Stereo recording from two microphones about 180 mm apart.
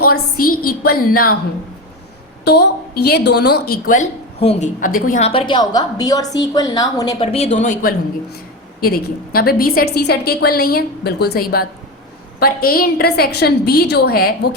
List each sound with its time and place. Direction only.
0.0 s a woman's voice: 55° left (ahead or behind)
2.4 s a woman's voice: 60° left (ahead or behind); by 5.3 s 45° left (ahead or behind)
5.3 s a woman's voice: 30° left (ahead or behind)
7.2 s a woman's voice: 35° left (ahead or behind); by 14.3 s 60° left (ahead or behind)